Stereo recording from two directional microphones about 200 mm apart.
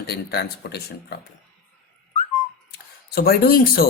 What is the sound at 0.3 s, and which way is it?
Speech, 55° left (ahead or behind).